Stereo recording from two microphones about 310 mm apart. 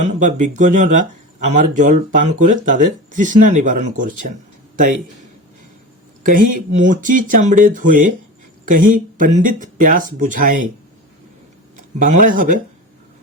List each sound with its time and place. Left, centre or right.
0.0 s speech: right
6.2 s speech: right
11.8 s speech: right